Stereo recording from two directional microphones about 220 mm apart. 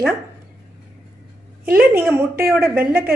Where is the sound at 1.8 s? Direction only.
10° right (ahead or behind).